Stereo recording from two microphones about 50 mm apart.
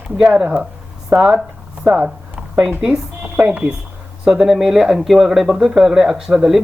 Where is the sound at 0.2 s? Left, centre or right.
Right.